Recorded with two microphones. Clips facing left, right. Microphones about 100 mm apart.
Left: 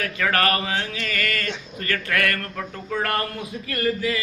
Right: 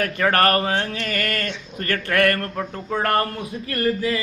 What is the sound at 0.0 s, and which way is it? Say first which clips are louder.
Speech: right 4 dB; 40° right (ahead or behind).